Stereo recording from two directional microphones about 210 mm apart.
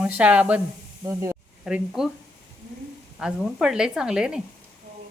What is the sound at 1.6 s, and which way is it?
Speech, 5° right (ahead or behind).